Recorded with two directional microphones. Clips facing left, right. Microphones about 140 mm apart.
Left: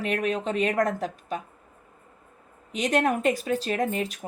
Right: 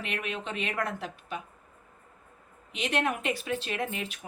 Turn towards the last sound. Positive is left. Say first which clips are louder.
# left 7 dB
turn(degrees=40)  # may be behind; listen again after turning